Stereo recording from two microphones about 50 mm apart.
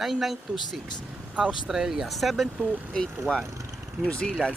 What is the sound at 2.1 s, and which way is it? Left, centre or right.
Speech, centre.